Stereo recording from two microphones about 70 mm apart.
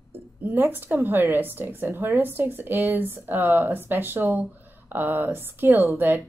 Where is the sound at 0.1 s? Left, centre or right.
Right.